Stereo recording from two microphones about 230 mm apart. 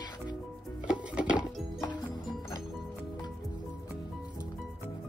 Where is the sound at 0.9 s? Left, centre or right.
Centre.